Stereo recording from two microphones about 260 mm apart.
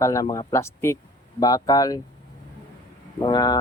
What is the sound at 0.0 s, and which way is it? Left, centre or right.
A man's voice, centre.